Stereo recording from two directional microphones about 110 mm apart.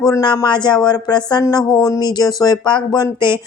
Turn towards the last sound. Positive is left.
turn(degrees=40)  # may be behind; listen again after turning